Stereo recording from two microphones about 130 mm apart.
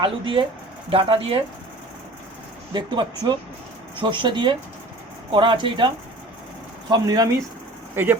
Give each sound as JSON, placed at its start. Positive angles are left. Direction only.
{"t": 0.0, "sound": "speech", "side_deg": -40}
{"t": 2.7, "sound": "speech", "side_deg": -35}
{"t": 6.9, "sound": "speech", "side_deg": -30}